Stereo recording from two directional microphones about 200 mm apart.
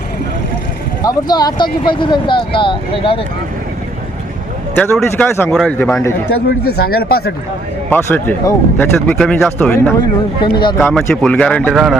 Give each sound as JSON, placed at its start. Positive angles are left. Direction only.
{"t": 1.0, "sound": "speech", "side_deg": 20}
{"t": 4.7, "sound": "speech", "side_deg": 10}
{"t": 6.7, "sound": "speech", "side_deg": 50}
{"t": 7.9, "sound": "speech", "side_deg": 10}
{"t": 10.4, "sound": "speech", "side_deg": 25}
{"t": 10.8, "sound": "speech", "side_deg": 0}